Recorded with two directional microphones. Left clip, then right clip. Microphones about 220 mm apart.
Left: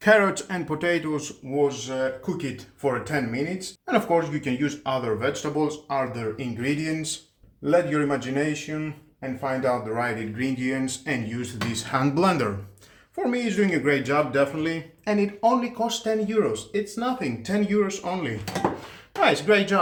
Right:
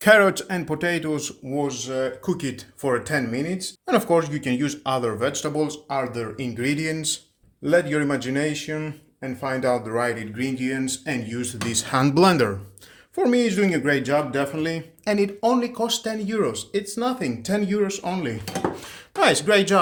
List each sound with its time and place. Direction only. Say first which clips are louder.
0.0 s speech: right 3 dB; 40° right (ahead or behind)
13.1 s speech: right 4 dB; 50° right (ahead or behind)